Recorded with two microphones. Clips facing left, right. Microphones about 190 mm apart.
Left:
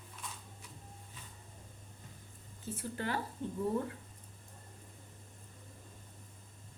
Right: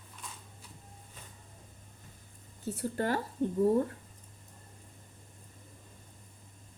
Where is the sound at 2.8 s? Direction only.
45° right (ahead or behind).